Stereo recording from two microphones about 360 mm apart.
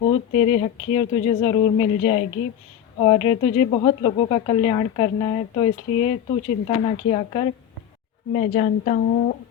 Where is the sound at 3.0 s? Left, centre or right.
Centre.